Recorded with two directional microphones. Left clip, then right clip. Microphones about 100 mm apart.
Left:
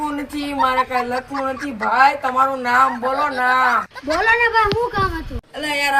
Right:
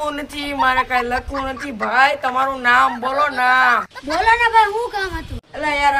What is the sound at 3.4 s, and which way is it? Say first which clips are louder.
Speech: right 2 dB; 35° right (ahead or behind).